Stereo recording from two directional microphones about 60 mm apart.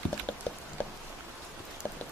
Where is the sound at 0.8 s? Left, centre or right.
Left.